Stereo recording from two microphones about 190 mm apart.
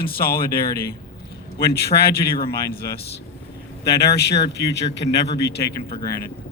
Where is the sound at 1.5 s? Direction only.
55° left (ahead or behind).